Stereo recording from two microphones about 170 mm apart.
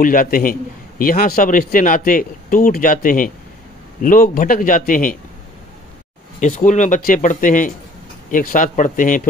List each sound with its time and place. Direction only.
0.0 s a man's voice: 55° left (ahead or behind)
6.4 s a man's voice: 45° left (ahead or behind)